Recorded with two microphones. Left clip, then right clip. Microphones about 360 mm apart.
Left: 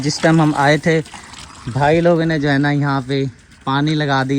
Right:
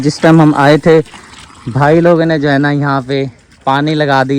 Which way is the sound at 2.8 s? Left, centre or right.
Right.